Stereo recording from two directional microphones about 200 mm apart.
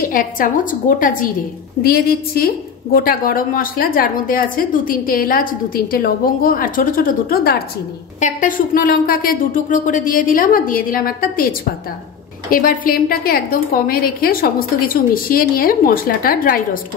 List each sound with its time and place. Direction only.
0.0 s a woman's voice: 45° left (ahead or behind)